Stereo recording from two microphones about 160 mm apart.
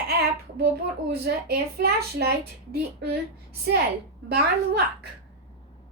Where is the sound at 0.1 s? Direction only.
90° right.